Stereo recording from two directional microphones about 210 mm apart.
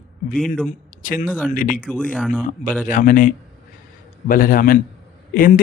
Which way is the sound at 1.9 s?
5° left (ahead or behind).